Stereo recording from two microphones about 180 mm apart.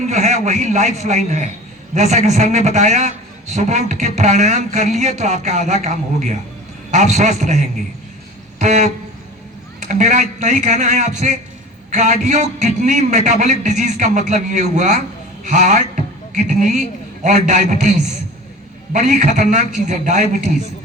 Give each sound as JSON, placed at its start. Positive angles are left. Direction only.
{"t": 0.1, "sound": "a man's voice", "side_deg": -40}
{"t": 8.5, "sound": "a sound", "side_deg": -40}
{"t": 9.8, "sound": "a man's voice", "side_deg": -45}
{"t": 18.9, "sound": "speech", "side_deg": -40}